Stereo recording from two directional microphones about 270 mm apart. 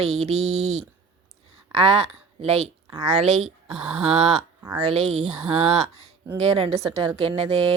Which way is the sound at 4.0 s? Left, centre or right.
Right.